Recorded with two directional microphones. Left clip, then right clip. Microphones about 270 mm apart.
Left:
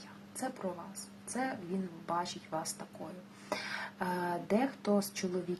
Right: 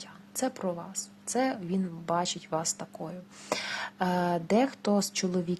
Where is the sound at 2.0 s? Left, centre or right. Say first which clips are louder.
Right 6 dB; right.